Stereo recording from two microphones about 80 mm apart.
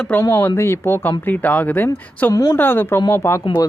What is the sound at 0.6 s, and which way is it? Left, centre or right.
Speech, left.